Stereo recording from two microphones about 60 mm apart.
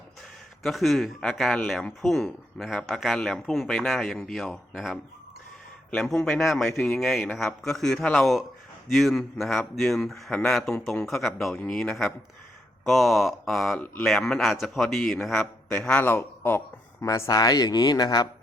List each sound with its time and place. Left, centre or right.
0.6 s a man's voice: centre
6.0 s a man's voice: centre
11.5 s a man's voice: centre
13.7 s speech: left
14.0 s a man's voice: centre
16.1 s a man's voice: left
17.2 s speech: left